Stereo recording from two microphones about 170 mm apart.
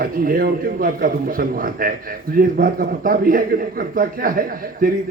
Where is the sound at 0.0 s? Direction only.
55° right (ahead or behind).